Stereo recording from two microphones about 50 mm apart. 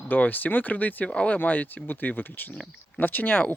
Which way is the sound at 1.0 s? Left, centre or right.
Left.